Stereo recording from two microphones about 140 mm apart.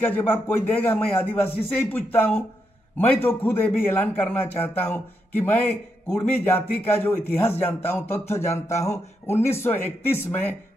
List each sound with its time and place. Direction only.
0.0 s a man's voice: 15° left (ahead or behind)